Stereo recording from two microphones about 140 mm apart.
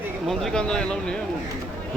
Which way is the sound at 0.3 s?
Centre (ahead or behind).